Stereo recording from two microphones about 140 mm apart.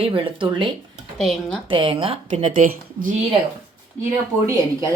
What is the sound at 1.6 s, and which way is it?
Speech, 40° right (ahead or behind).